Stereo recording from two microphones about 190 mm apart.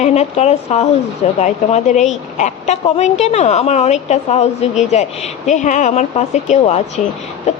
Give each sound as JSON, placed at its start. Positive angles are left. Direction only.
{"t": 0.0, "sound": "a woman's voice", "side_deg": 35}